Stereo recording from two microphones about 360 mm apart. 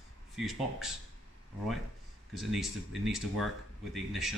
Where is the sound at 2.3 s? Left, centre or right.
Centre.